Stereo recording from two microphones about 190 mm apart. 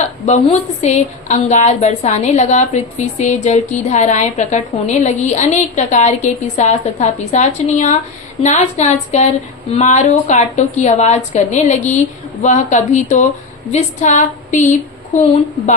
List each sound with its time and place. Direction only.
0.3 s a woman's voice: 35° left (ahead or behind)